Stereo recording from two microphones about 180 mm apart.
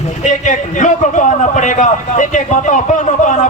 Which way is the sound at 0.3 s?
45° left (ahead or behind).